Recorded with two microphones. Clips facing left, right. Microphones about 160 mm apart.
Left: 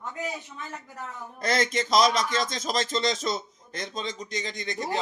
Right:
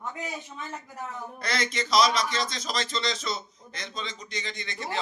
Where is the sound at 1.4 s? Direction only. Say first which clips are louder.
Left 5 dB; 45° left (ahead or behind).